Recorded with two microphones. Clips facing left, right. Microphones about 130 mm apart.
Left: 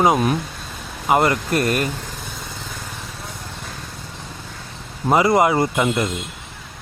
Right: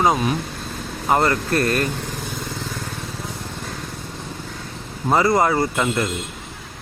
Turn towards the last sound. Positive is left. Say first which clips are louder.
# left 2 dB
turn(degrees=10)  # may be behind; listen again after turning